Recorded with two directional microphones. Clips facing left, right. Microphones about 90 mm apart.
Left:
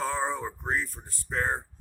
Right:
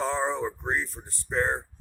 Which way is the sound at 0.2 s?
5° left (ahead or behind).